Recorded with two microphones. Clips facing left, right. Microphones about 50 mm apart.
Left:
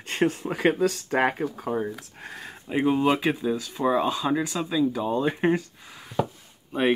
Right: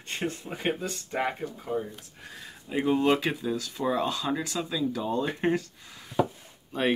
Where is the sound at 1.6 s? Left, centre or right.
Left.